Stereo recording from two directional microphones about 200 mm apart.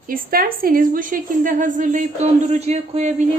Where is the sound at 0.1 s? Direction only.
45° right (ahead or behind).